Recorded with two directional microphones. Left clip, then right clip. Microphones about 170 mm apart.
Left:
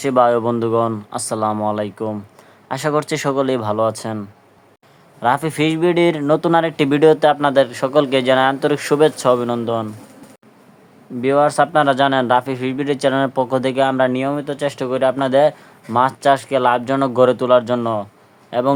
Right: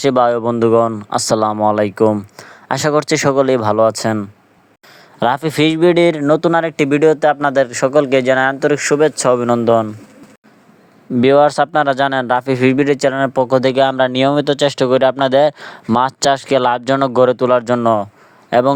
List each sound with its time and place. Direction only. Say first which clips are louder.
0.0 s speech: right 1 dB; 40° right (ahead or behind)
11.2 s speech: right 4 dB; 50° right (ahead or behind)